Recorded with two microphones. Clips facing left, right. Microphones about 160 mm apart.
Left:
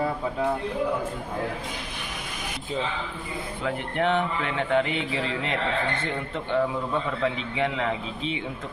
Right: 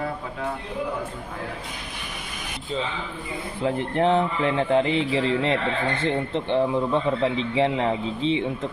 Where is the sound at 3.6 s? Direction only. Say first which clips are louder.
Right 4 dB; 30° right (ahead or behind).